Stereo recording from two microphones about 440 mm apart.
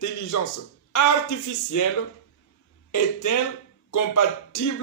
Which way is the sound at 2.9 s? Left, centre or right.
Left.